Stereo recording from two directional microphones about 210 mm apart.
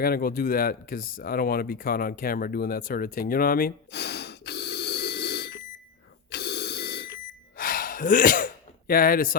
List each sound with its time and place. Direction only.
0.0 s speech: 45° left (ahead or behind)
6.3 s alarm clock: 50° left (ahead or behind)